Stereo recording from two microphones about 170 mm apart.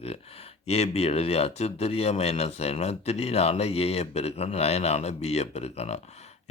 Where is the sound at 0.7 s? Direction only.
35° left (ahead or behind).